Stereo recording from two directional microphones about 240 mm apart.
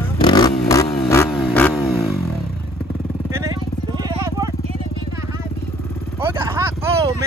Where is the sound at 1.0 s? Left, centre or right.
Centre.